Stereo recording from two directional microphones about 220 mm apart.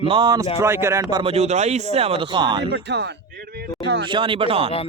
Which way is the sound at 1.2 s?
25° right (ahead or behind).